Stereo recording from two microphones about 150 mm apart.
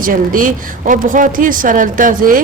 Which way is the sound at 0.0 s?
65° right (ahead or behind).